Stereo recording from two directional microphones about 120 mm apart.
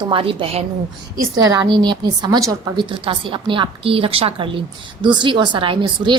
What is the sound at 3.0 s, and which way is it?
A woman's voice, 45° right (ahead or behind).